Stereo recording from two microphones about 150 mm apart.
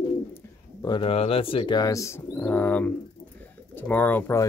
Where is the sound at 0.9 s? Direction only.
35° left (ahead or behind).